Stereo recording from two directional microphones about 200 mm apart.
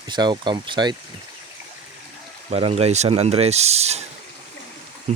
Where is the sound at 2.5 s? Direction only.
30° right (ahead or behind).